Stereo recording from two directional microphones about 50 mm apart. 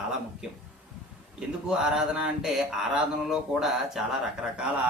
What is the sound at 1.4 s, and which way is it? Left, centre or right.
A man's voice, centre.